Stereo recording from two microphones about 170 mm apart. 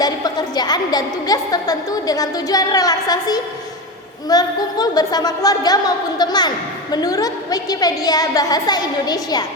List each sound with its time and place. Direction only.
0.0 s a woman's voice: 25° left (ahead or behind)